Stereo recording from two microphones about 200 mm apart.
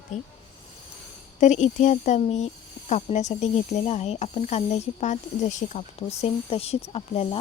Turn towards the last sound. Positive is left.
turn(degrees=30)  # may be behind; listen again after turning